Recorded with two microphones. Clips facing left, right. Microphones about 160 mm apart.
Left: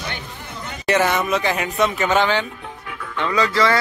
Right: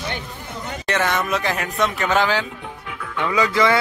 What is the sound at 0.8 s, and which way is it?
A man's voice, 5° left (ahead or behind).